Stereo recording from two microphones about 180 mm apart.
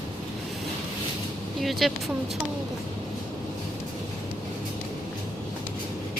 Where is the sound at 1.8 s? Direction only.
Centre (ahead or behind).